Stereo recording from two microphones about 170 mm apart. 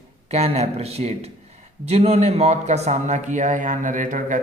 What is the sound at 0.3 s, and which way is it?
A man's voice, 40° right (ahead or behind).